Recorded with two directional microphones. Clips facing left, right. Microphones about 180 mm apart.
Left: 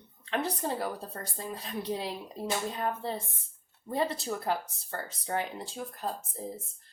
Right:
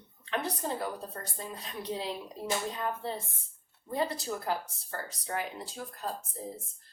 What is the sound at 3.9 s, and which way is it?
Speech, 25° left (ahead or behind).